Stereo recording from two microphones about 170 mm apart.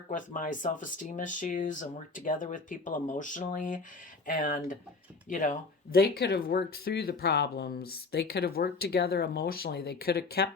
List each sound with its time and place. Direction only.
0.1 s speech: 50° left (ahead or behind); by 10.5 s 65° left (ahead or behind)